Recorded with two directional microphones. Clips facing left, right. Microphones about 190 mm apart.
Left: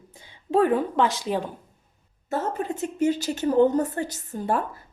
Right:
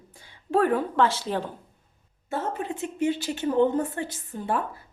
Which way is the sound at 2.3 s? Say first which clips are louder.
Left 3 dB; 40° left (ahead or behind).